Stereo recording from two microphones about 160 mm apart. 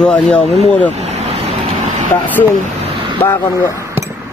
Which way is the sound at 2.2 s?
10° left (ahead or behind).